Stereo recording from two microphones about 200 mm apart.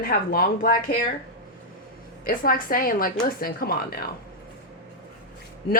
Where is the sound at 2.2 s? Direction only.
45° left (ahead or behind).